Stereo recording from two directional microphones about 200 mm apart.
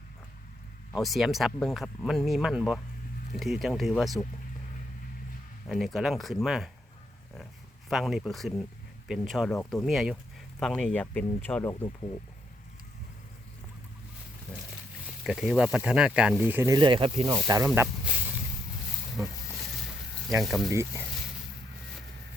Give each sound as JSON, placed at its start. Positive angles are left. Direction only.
{"t": 0.9, "sound": "speech", "side_deg": 0}
{"t": 5.6, "sound": "speech", "side_deg": 0}
{"t": 7.9, "sound": "speech", "side_deg": 0}
{"t": 15.2, "sound": "speech", "side_deg": 0}
{"t": 16.7, "sound": "speech", "side_deg": -25}
{"t": 17.7, "sound": "snake", "side_deg": -5}
{"t": 20.4, "sound": "speech", "side_deg": 0}
{"t": 20.7, "sound": "speech", "side_deg": -15}